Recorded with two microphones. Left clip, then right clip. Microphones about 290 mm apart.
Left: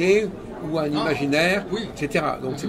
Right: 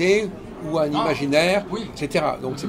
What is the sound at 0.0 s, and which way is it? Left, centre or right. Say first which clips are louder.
A man's voice: even; centre.